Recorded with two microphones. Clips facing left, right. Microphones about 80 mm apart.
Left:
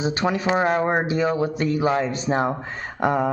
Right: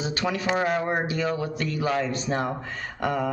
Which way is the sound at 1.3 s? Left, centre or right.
Left.